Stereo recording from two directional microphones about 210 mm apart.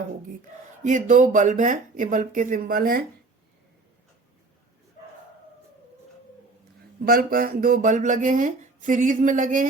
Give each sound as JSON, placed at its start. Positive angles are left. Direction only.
{"t": 0.9, "sound": "speech", "side_deg": -40}
{"t": 7.0, "sound": "speech", "side_deg": -45}